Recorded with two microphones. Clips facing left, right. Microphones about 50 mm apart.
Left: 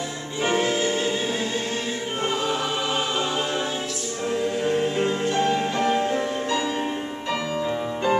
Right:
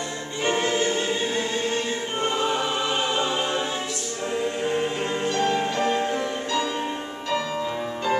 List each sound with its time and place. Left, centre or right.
0.4 s choir: centre
4.6 s music: centre
7.6 s music: centre